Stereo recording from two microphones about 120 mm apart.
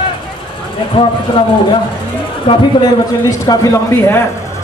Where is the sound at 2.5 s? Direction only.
45° left (ahead or behind).